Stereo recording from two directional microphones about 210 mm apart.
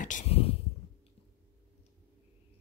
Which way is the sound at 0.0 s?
35° left (ahead or behind).